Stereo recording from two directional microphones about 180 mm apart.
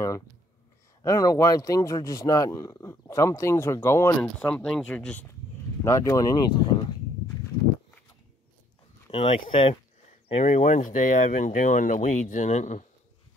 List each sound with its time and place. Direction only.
1.0 s speech: 20° left (ahead or behind)
5.9 s speech: 20° left (ahead or behind)
9.1 s speech: 30° left (ahead or behind)